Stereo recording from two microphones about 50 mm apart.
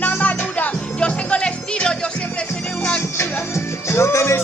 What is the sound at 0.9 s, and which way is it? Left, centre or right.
Music, left.